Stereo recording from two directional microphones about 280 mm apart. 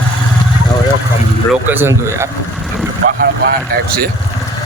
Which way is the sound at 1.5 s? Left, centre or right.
Centre.